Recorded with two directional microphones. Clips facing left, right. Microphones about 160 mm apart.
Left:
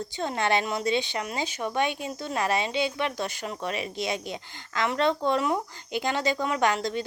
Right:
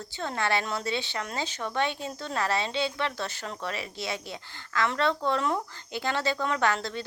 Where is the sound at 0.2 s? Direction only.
20° left (ahead or behind).